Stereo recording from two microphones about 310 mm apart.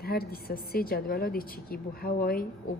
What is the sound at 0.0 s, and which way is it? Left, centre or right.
A woman's voice, left.